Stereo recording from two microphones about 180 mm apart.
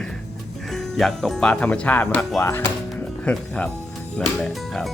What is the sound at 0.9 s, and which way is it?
Speech, centre (ahead or behind).